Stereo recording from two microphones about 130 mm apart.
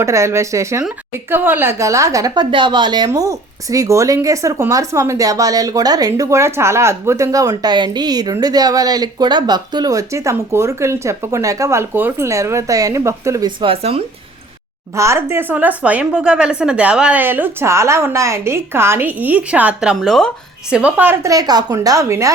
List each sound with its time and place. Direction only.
0.0 s speech: 20° right (ahead or behind)
3.1 s speech: 25° right (ahead or behind)
13.6 s speech: 45° right (ahead or behind)
14.9 s speech: 20° right (ahead or behind)